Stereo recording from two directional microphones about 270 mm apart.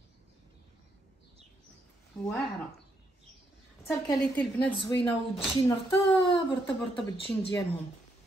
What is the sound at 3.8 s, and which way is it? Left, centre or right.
A woman's voice, centre.